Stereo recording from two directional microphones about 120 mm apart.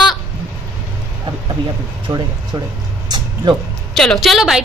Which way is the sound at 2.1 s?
30° right (ahead or behind).